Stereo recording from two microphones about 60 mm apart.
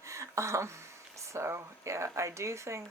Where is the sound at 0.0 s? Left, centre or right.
Right.